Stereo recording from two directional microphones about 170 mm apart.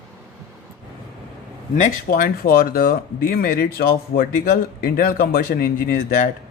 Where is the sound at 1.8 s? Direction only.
55° left (ahead or behind).